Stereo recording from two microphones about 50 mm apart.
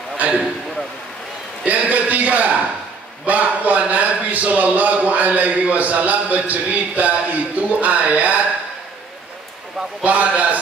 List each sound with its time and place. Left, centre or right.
1.6 s a sound: right
3.3 s speech: right
10.0 s a man's voice: right